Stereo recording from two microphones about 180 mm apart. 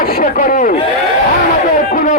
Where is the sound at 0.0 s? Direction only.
55° left (ahead or behind).